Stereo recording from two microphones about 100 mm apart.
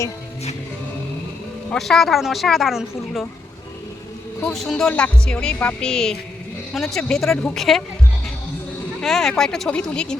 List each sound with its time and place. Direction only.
1.7 s speech: 5° left (ahead or behind)
4.5 s music: centre (ahead or behind)
6.7 s speech: 5° left (ahead or behind)
9.0 s speech: 5° left (ahead or behind)